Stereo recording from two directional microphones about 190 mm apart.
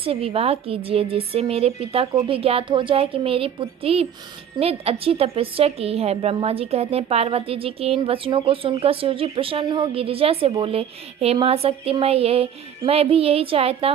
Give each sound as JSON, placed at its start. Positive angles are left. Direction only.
{"t": 0.0, "sound": "a woman's voice", "side_deg": -30}